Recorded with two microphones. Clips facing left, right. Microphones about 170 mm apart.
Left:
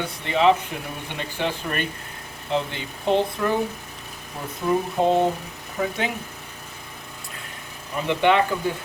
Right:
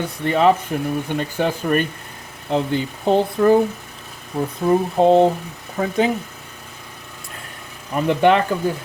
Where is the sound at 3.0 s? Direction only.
40° right (ahead or behind).